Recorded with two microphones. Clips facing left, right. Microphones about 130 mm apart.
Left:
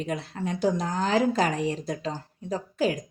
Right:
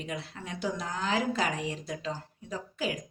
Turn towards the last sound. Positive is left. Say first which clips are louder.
# left 7 dB
turn(degrees=40)  # may be behind; listen again after turning